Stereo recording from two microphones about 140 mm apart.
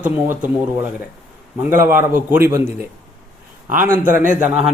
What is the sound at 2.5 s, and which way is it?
Speech, 25° right (ahead or behind).